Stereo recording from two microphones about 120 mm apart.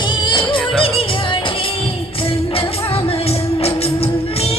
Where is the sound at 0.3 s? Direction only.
45° left (ahead or behind).